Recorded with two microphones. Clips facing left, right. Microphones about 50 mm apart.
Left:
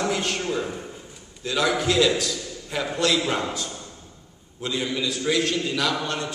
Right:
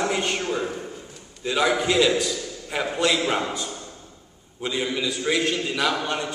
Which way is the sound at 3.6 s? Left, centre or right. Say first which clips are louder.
Right 1 dB; centre.